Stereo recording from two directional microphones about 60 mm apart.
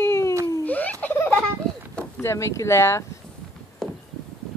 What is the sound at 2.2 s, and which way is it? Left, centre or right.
Speech, left.